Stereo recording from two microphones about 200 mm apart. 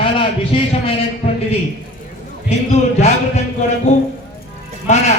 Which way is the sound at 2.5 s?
30° left (ahead or behind).